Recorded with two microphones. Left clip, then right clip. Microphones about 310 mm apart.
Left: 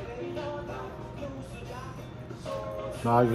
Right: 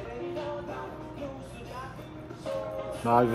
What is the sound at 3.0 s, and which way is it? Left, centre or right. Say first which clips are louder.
Speech: even; centre.